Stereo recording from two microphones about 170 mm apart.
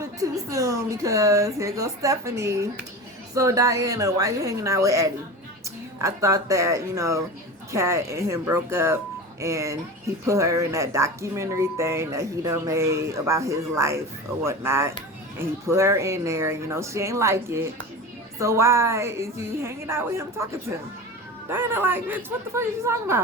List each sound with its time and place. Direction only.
0.2 s a woman's voice: 20° right (ahead or behind)